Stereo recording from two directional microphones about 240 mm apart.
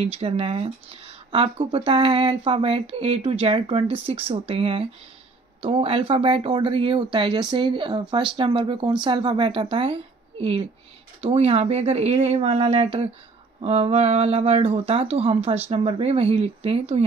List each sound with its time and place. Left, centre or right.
0.0 s speech: right